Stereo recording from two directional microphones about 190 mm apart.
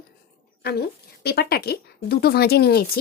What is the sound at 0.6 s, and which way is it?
A woman's voice, 60° left (ahead or behind).